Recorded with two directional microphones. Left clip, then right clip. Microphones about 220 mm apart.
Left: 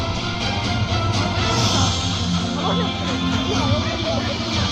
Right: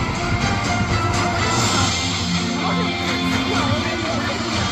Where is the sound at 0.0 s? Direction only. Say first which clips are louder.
Right 2 dB; 55° left (ahead or behind).